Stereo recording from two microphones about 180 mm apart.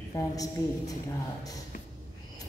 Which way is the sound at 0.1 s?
20° left (ahead or behind).